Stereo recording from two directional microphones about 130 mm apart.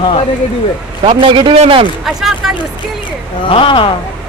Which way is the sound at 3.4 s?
40° left (ahead or behind).